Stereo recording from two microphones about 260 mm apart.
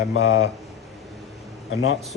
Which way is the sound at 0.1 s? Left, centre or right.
Left.